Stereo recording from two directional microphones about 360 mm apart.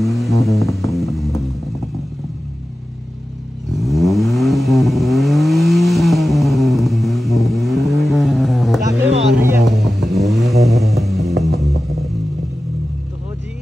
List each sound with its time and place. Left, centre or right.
0.0 s music: centre
3.7 s vehicle: centre
11.5 s vehicle: right